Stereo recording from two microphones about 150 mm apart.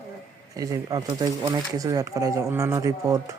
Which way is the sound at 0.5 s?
20° right (ahead or behind).